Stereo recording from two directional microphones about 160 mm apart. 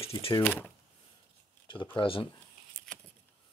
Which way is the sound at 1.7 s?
30° left (ahead or behind).